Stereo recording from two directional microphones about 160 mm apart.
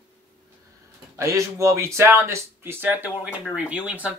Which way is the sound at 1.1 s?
20° right (ahead or behind).